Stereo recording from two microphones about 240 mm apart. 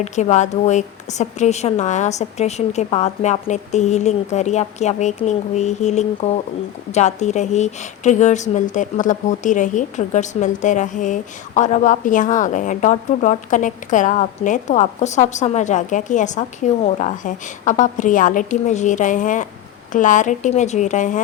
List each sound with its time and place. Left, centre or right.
0.0 s a woman's voice: left